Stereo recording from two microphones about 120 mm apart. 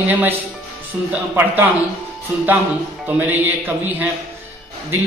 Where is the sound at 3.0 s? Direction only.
15° right (ahead or behind).